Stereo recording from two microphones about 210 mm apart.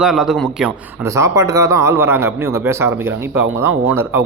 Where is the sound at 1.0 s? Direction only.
15° right (ahead or behind).